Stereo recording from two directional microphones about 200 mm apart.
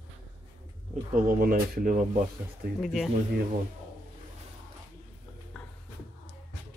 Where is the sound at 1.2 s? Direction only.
45° right (ahead or behind).